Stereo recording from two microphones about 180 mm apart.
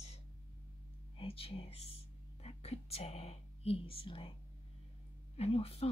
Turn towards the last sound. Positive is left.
turn(degrees=35)  # may be behind; listen again after turning